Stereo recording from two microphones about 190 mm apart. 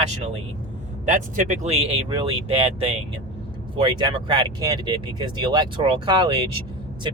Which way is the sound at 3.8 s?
25° right (ahead or behind).